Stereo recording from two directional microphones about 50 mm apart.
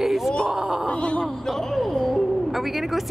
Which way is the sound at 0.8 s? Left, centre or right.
Left.